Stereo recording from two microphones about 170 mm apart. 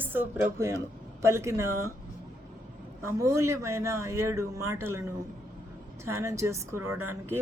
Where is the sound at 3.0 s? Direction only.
15° right (ahead or behind).